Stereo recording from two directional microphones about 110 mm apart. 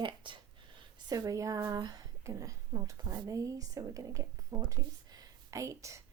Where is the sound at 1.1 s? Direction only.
30° right (ahead or behind).